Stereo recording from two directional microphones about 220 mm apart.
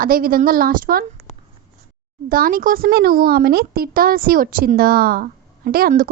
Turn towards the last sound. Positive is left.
turn(degrees=-40)  # may be behind; listen again after turning